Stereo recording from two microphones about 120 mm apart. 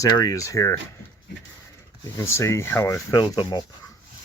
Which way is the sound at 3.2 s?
40° left (ahead or behind).